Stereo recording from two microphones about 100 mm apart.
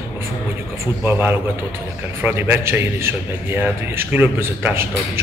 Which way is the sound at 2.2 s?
20° right (ahead or behind).